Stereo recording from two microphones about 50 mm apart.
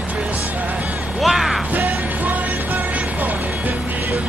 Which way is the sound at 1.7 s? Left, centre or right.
Right.